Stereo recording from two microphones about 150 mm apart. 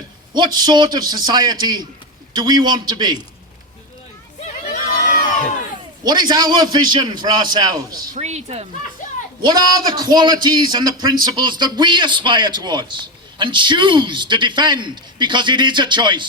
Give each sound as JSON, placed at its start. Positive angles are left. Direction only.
{"t": 0.3, "sound": "a man's voice", "side_deg": -30}
{"t": 4.4, "sound": "crowd", "side_deg": 65}
{"t": 6.0, "sound": "a man's voice", "side_deg": -30}
{"t": 8.1, "sound": "speech", "side_deg": -50}
{"t": 9.0, "sound": "a sound", "side_deg": 60}
{"t": 9.4, "sound": "a man's voice", "side_deg": -25}